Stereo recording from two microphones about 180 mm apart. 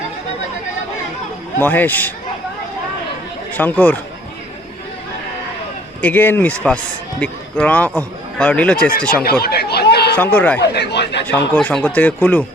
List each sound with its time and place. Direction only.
1.5 s speech: 10° left (ahead or behind)
3.5 s speech: 10° left (ahead or behind)
6.0 s speech: 10° left (ahead or behind)
8.9 s speech: 50° left (ahead or behind)
9.4 s chatter: 60° left (ahead or behind)
10.2 s speech: 5° left (ahead or behind)
10.8 s speech: 70° left (ahead or behind)
11.3 s speech: 10° left (ahead or behind)